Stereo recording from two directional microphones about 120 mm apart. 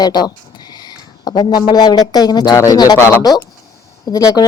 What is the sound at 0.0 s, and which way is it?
Speech, 35° left (ahead or behind).